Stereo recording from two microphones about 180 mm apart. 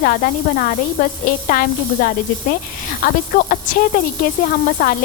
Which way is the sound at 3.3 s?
50° left (ahead or behind).